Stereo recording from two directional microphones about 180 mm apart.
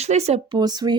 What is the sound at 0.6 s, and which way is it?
Speech, 20° right (ahead or behind).